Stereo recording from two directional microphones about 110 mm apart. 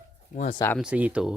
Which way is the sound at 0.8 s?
10° right (ahead or behind).